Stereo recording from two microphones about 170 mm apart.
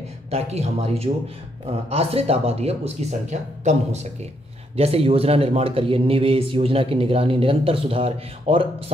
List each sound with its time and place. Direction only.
0.3 s a man's voice: 40° right (ahead or behind)